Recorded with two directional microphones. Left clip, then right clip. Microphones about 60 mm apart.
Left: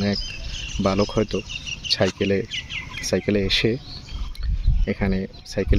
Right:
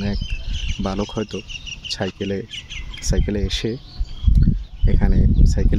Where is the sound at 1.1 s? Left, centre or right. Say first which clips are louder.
Left 3 dB; centre.